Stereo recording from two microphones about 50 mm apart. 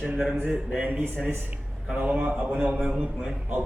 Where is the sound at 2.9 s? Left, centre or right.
Centre.